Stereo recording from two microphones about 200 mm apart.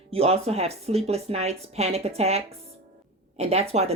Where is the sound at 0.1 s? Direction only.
30° right (ahead or behind).